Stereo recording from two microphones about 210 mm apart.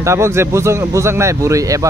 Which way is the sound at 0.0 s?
15° right (ahead or behind).